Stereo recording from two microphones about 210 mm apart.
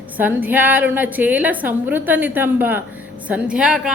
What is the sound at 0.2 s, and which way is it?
A woman's voice, 10° right (ahead or behind).